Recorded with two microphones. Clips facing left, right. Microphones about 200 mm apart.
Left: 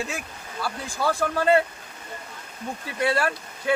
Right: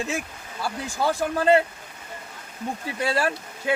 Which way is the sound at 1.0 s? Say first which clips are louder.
Right 1 dB; 20° right (ahead or behind).